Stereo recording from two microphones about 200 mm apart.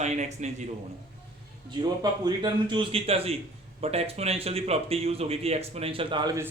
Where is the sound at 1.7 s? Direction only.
20° right (ahead or behind).